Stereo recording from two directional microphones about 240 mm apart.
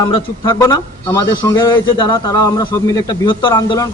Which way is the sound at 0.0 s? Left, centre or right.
Left.